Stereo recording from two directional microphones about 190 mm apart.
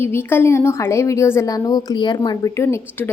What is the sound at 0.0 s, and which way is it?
A woman's voice, 10° left (ahead or behind).